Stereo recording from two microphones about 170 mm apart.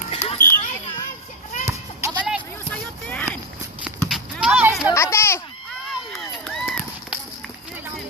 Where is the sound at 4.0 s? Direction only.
Centre (ahead or behind).